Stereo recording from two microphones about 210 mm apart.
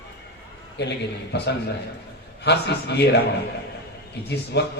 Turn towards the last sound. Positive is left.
turn(degrees=55)  # may be behind; listen again after turning